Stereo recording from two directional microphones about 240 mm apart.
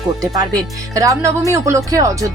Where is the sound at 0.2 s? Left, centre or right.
Centre.